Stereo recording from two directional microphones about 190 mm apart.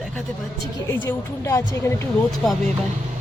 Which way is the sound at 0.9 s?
15° left (ahead or behind).